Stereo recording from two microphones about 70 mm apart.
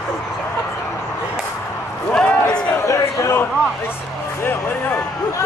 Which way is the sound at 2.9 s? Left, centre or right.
Left.